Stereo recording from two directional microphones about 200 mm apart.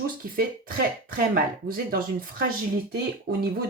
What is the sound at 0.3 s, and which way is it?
Speech, 45° right (ahead or behind).